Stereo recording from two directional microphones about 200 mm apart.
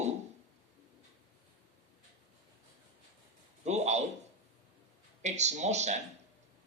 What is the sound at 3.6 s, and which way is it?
Speech, 35° right (ahead or behind).